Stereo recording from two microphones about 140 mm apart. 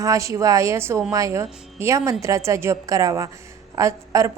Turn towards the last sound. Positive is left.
turn(degrees=-20)  # may be behind; listen again after turning